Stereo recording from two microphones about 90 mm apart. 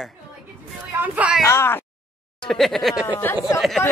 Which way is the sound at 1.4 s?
30° left (ahead or behind).